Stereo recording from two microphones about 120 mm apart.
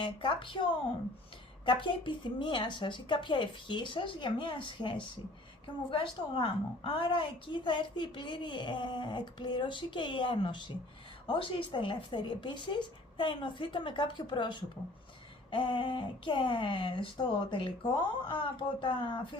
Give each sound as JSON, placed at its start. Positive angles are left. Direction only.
{"t": 0.0, "sound": "a woman's voice", "side_deg": 40}